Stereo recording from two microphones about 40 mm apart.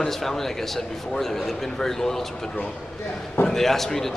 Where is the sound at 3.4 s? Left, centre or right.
Centre.